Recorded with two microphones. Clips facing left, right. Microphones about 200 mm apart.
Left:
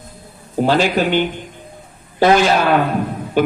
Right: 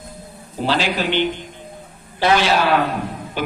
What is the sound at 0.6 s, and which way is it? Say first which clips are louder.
A man's voice: left 5 dB; 50° left (ahead or behind).